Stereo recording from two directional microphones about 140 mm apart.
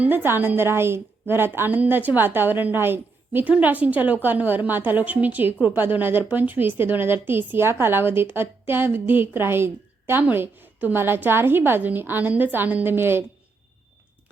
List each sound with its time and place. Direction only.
0.0 s a woman's voice: 15° right (ahead or behind)